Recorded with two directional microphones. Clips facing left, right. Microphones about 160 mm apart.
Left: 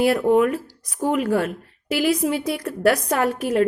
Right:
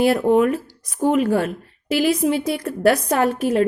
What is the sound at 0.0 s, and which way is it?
A woman's voice, 25° right (ahead or behind).